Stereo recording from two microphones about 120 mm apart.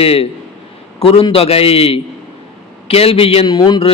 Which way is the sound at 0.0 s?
55° left (ahead or behind).